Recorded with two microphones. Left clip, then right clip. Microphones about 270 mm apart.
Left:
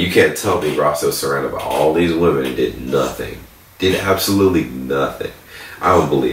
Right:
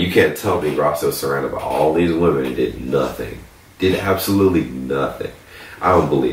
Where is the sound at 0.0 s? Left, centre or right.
Centre.